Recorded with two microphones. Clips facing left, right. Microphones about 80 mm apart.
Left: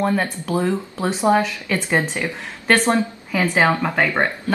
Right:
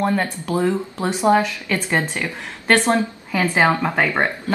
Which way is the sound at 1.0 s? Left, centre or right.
Centre.